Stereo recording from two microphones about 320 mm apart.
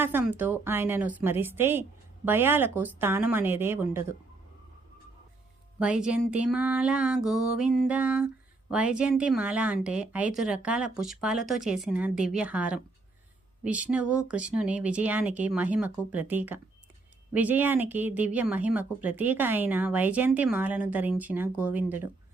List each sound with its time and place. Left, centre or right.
0.0 s a woman's voice: centre
5.8 s a woman's voice: centre